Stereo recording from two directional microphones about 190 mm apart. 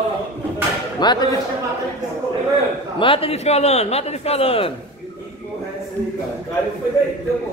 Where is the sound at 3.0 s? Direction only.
30° left (ahead or behind).